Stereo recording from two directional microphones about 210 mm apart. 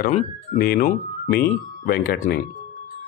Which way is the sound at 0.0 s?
40° left (ahead or behind).